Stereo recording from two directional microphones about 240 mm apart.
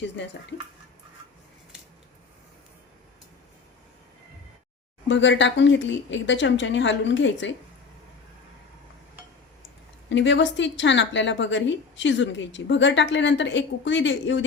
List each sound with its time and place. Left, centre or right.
5.0 s a woman's voice: left
10.1 s a woman's voice: left